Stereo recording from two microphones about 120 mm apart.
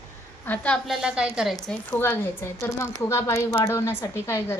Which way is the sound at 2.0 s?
20° left (ahead or behind).